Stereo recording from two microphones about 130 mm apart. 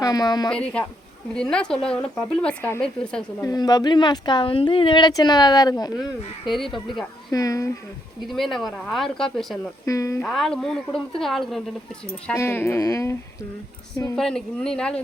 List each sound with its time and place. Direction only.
0.0 s speech: 30° left (ahead or behind)
0.5 s speech: 10° left (ahead or behind)
3.4 s speech: 30° left (ahead or behind)
8.3 s speech: centre (ahead or behind)
9.8 s speech: 25° left (ahead or behind)
10.2 s speech: centre (ahead or behind)
12.3 s speech: 20° left (ahead or behind)
14.2 s speech: 5° left (ahead or behind)